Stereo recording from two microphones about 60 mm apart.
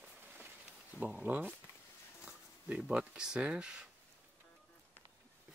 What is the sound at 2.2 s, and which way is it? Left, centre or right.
Speech, centre.